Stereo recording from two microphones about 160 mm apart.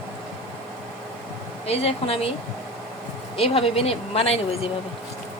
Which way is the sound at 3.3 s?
35° left (ahead or behind).